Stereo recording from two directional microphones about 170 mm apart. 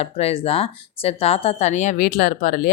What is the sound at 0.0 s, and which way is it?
Speech, 35° left (ahead or behind).